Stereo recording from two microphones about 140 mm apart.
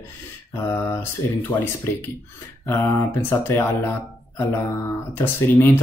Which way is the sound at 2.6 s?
15° left (ahead or behind).